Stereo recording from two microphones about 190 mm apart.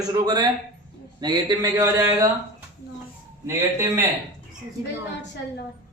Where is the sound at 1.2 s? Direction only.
20° right (ahead or behind).